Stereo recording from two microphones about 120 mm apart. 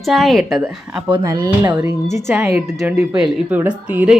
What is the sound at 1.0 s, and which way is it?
Speech, 35° right (ahead or behind).